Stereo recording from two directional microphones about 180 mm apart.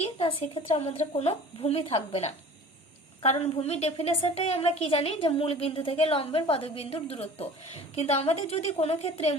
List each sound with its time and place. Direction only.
0.0 s a woman's voice: 30° left (ahead or behind)